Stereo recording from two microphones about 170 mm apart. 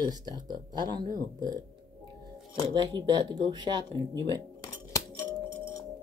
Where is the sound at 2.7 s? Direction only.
25° right (ahead or behind).